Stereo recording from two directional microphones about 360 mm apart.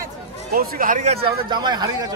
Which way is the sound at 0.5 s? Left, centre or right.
Right.